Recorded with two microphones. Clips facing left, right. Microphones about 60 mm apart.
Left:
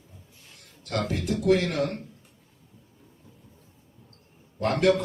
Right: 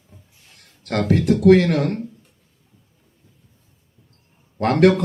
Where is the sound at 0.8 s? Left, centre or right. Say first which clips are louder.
Right 10 dB; right.